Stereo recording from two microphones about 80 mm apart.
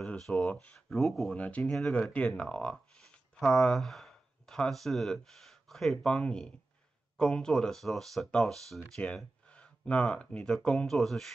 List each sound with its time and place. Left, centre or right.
0.0 s a sound: centre
0.5 s speech: centre
0.7 s speech: centre
1.3 s speech: centre
1.6 s speech: centre